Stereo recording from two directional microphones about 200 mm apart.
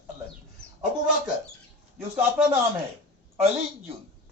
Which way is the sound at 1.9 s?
5° right (ahead or behind).